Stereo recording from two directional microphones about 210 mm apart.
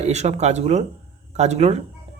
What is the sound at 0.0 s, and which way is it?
Speech, 30° right (ahead or behind).